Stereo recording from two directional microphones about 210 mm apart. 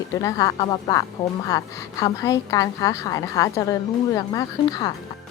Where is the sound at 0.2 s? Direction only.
15° left (ahead or behind).